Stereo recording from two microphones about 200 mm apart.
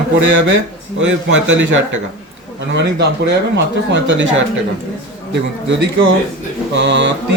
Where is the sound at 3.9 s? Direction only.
65° right (ahead or behind).